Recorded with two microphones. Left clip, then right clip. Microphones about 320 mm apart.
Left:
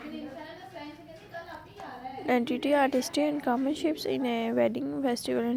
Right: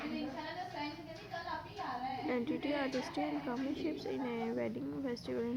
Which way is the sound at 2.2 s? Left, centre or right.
Left.